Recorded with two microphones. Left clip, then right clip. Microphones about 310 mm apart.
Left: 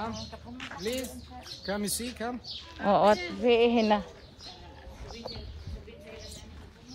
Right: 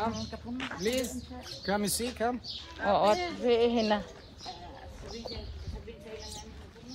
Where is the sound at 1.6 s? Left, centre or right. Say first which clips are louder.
Right 3 dB; centre.